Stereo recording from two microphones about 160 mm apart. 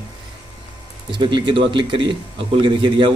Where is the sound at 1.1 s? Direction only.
30° right (ahead or behind).